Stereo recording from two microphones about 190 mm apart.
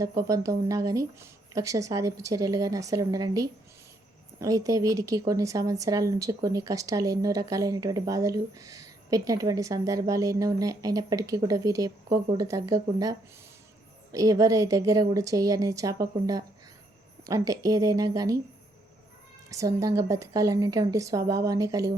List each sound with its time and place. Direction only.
0.2 s speech: 15° right (ahead or behind)
17.2 s speech: 15° right (ahead or behind)
19.5 s speech: 15° right (ahead or behind)